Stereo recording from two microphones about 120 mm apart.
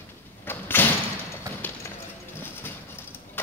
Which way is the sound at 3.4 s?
15° left (ahead or behind).